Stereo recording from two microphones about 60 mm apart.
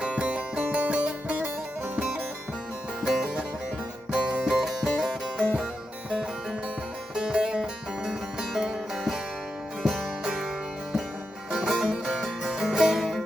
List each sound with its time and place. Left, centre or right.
0.0 s music: centre
3.0 s music: centre
5.4 s music: centre
7.2 s music: centre
11.5 s music: centre